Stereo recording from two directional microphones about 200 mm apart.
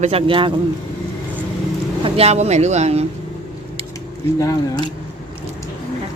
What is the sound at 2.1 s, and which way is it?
Speech, 30° right (ahead or behind).